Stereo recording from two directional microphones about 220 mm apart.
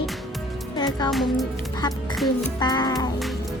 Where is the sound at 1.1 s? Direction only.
Centre (ahead or behind).